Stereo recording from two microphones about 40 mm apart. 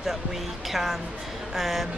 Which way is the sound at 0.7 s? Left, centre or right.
Centre.